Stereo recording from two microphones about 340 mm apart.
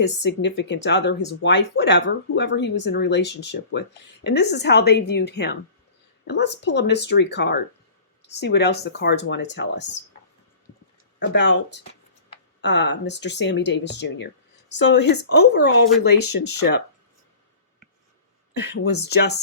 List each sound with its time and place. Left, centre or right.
0.3 s speech: left
11.2 s speech: left
18.5 s speech: left